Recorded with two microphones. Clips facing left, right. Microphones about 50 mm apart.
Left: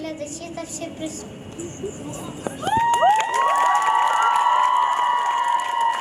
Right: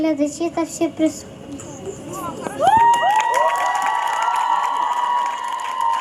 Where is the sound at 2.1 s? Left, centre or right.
Right.